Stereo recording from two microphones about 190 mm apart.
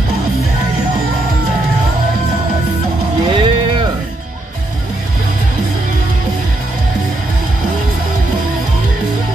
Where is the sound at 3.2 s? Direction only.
25° right (ahead or behind).